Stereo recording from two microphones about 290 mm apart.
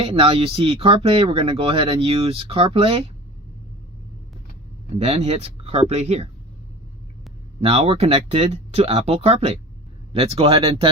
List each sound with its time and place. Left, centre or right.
0.0 s speech: centre
4.9 s speech: right
7.6 s speech: centre